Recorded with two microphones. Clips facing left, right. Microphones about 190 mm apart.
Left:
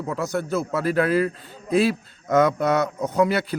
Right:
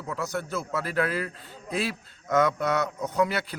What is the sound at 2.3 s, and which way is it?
Speech, 30° left (ahead or behind).